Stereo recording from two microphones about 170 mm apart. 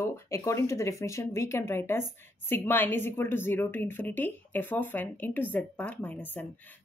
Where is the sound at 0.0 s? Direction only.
15° left (ahead or behind).